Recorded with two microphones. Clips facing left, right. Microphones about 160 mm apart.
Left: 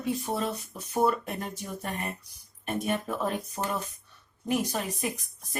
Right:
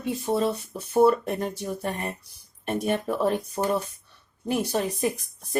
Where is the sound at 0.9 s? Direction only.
35° right (ahead or behind).